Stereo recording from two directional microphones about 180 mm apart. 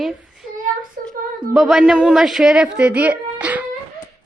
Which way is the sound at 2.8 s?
5° right (ahead or behind).